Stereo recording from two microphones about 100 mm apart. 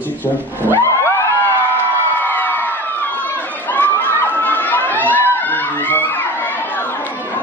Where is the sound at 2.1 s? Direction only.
20° left (ahead or behind).